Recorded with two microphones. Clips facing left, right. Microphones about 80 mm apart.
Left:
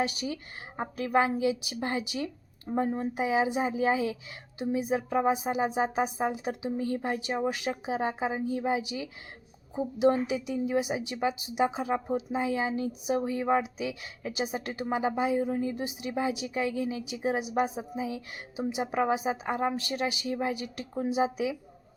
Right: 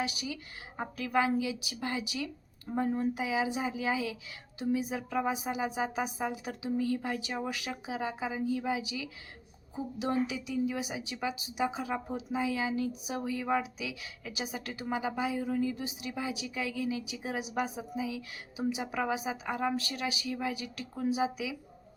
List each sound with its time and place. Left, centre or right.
0.0 s a woman's voice: left